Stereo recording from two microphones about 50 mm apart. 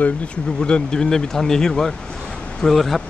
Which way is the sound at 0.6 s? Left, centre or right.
Centre.